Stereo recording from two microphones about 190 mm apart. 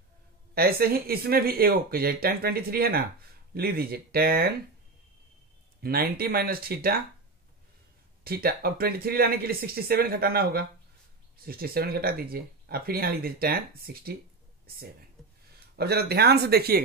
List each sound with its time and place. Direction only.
0.6 s speech: 55° right (ahead or behind)
5.8 s speech: 50° right (ahead or behind)
8.2 s speech: 50° right (ahead or behind)
15.7 s speech: 55° right (ahead or behind)